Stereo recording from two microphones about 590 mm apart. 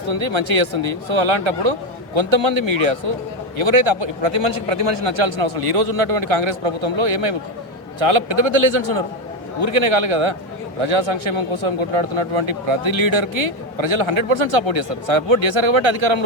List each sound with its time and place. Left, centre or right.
0.1 s a man's voice: right